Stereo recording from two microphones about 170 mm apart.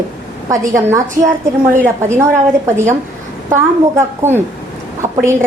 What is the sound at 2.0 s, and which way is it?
Speech, 15° right (ahead or behind).